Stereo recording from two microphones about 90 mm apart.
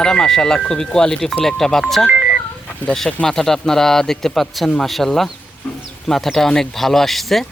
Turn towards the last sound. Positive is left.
turn(degrees=0)  # may be behind; listen again after turning